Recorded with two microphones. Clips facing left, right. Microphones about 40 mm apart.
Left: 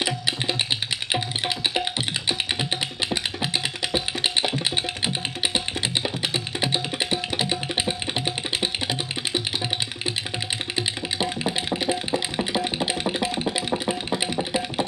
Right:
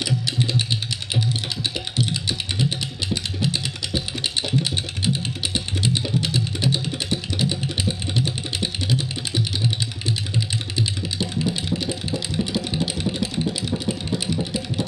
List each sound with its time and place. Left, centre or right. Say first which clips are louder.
0.0 s music: right 1 dB; left
1.7 s music: even; left
10.8 s music: even; left
13.0 s a sound: even; left